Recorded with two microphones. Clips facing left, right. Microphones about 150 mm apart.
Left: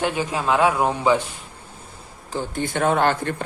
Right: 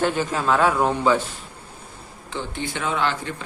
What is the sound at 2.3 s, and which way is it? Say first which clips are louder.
Speech: left 4 dB; 45° left (ahead or behind).